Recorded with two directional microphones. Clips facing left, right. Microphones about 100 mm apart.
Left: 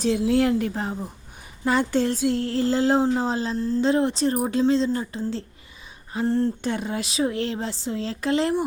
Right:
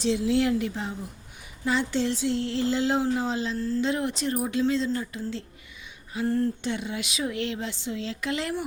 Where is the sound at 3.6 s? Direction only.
20° left (ahead or behind).